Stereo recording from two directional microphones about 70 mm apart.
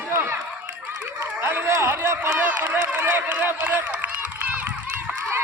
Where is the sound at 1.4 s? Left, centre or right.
Right.